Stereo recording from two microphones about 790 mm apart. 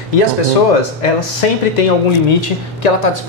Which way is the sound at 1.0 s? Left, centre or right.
Left.